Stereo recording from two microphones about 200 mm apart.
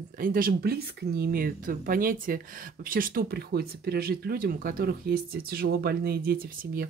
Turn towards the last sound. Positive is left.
turn(degrees=-45)  # may be behind; listen again after turning